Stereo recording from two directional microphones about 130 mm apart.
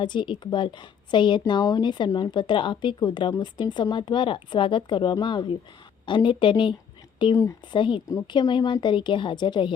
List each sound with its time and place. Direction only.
0.0 s a woman's voice: 40° left (ahead or behind)